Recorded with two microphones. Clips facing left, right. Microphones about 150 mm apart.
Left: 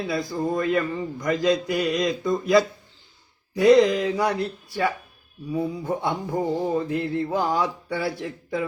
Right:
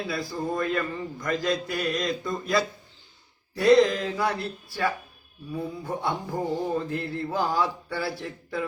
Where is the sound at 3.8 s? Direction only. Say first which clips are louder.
Left 3 dB; 15° left (ahead or behind).